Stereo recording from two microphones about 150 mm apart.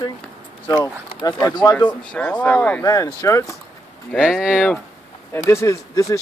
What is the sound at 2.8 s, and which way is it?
Speech, 20° left (ahead or behind).